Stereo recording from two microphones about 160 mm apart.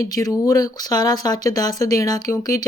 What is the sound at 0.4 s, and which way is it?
Speech, 20° left (ahead or behind).